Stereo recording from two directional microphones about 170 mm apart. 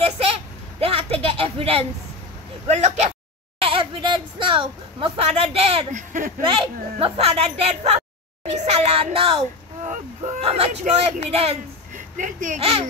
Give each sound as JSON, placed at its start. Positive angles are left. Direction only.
{"t": 0.0, "sound": "a sound", "side_deg": -35}
{"t": 2.7, "sound": "speech", "side_deg": -40}
{"t": 3.6, "sound": "speech", "side_deg": -30}
{"t": 5.9, "sound": "speech", "side_deg": -50}
{"t": 6.4, "sound": "speech", "side_deg": -30}
{"t": 9.8, "sound": "speech", "side_deg": -50}